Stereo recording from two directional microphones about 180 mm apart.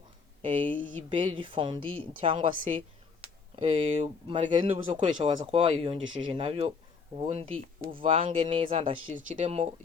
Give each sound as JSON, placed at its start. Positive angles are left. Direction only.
{"t": 0.4, "sound": "speech", "side_deg": -30}
{"t": 9.2, "sound": "speech", "side_deg": -40}